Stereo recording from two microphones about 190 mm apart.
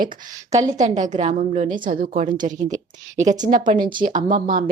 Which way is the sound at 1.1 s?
40° right (ahead or behind).